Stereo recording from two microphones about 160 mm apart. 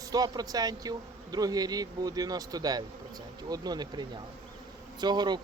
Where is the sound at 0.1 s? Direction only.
25° right (ahead or behind).